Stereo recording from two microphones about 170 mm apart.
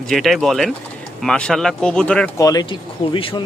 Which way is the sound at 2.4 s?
20° left (ahead or behind).